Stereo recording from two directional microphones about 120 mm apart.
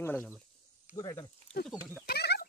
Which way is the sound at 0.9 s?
30° left (ahead or behind).